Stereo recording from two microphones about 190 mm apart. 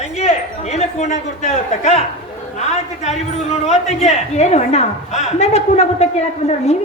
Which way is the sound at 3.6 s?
35° left (ahead or behind).